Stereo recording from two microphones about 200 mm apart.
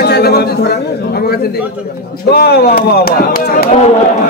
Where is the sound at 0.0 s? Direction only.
55° left (ahead or behind).